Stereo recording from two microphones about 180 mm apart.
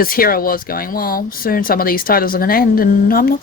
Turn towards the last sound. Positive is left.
turn(degrees=55)  # may be behind; listen again after turning